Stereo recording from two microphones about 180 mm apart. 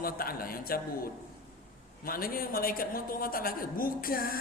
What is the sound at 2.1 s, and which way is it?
A woman's voice, 55° left (ahead or behind).